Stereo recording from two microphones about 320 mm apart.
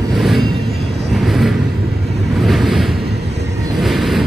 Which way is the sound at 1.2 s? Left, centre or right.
Centre.